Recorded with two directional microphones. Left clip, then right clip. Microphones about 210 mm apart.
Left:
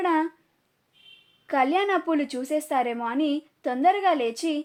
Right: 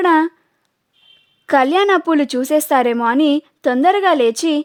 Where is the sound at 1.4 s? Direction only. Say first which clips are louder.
Right 10 dB; 50° right (ahead or behind).